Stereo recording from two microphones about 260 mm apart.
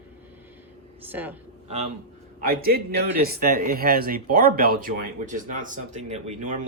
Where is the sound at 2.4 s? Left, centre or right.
Right.